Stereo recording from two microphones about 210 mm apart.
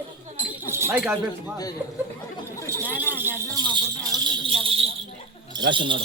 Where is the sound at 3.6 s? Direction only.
20° right (ahead or behind).